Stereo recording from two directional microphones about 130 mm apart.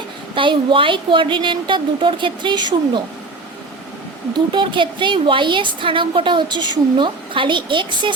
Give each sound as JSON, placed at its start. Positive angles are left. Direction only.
{"t": 0.3, "sound": "a woman's voice", "side_deg": -40}
{"t": 4.4, "sound": "a woman's voice", "side_deg": -35}